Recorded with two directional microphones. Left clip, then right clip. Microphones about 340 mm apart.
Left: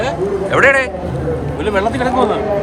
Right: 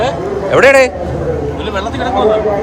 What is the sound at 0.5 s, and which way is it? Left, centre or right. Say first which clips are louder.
Speech: right 5 dB; centre.